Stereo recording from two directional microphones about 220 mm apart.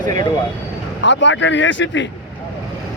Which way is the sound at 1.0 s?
55° left (ahead or behind).